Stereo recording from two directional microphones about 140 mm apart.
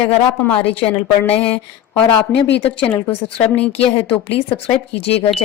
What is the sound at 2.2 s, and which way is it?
Speech, 40° left (ahead or behind).